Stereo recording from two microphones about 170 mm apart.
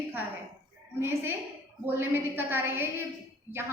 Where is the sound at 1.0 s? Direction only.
15° right (ahead or behind).